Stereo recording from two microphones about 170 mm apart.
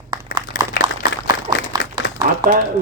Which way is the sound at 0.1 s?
25° right (ahead or behind).